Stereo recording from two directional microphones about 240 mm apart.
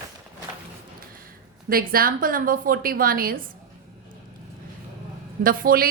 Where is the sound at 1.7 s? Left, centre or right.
Right.